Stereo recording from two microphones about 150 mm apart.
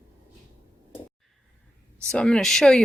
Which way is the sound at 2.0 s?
5° left (ahead or behind).